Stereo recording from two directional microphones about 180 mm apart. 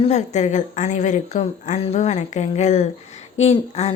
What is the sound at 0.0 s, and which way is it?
A woman's voice, 40° left (ahead or behind).